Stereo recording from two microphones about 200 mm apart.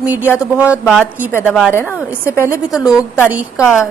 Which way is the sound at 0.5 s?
5° right (ahead or behind).